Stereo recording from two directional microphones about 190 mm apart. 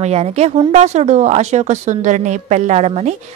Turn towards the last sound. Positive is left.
turn(degrees=-35)  # may be behind; listen again after turning